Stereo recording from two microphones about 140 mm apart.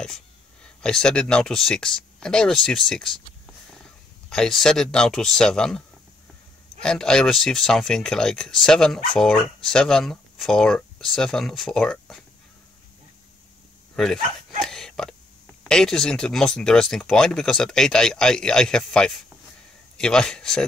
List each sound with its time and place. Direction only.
0.8 s speech: 5° left (ahead or behind)
4.3 s speech: centre (ahead or behind)
13.9 s speech: centre (ahead or behind)
14.6 s a sound: centre (ahead or behind)
15.7 s speech: 5° left (ahead or behind)